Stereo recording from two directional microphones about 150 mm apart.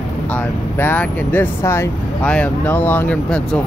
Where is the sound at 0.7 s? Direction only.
10° left (ahead or behind).